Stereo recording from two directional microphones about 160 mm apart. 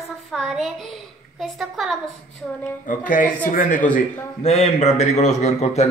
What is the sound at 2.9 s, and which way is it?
A man's voice, 55° left (ahead or behind).